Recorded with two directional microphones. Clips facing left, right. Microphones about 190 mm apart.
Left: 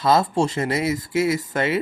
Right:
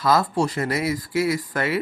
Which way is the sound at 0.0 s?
25° left (ahead or behind).